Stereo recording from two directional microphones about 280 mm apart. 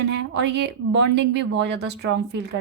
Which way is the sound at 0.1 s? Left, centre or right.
Right.